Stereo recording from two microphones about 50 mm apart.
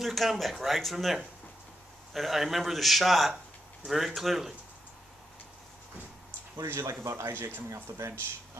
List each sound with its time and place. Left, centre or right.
0.0 s speech: centre
6.5 s speech: right